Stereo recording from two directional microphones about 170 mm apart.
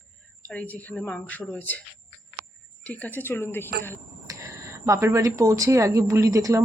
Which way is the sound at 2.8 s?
10° left (ahead or behind).